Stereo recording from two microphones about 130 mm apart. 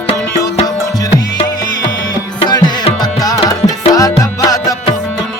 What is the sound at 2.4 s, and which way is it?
Music, 30° left (ahead or behind).